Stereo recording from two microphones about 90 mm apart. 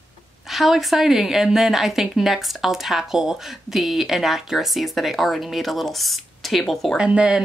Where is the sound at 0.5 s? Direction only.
Centre (ahead or behind).